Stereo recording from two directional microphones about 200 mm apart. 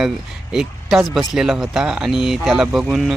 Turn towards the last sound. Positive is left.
turn(degrees=0)  # may be behind; listen again after turning